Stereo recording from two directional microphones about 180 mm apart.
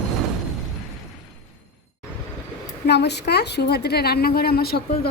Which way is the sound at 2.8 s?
70° left (ahead or behind).